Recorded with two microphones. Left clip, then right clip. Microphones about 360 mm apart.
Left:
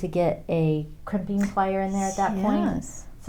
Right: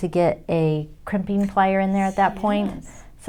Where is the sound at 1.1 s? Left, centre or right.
Right.